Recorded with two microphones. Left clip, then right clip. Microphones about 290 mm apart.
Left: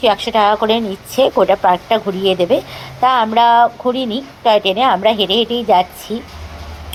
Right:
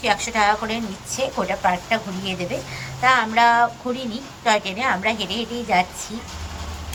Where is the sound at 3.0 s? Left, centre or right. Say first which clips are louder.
Left 5 dB; left.